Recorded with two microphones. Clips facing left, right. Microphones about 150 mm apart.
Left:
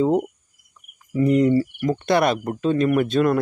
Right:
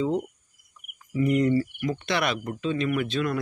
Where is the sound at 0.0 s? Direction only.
45° left (ahead or behind).